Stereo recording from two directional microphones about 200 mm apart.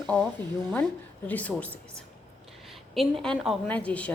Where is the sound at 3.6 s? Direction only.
5° left (ahead or behind).